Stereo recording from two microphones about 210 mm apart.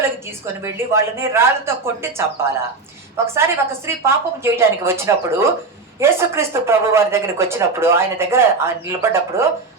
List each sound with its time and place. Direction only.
0.6 s speech: 10° right (ahead or behind)
3.3 s speech: 10° right (ahead or behind)